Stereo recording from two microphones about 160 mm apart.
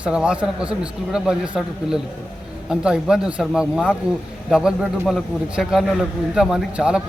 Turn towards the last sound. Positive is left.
turn(degrees=-5)  # may be behind; listen again after turning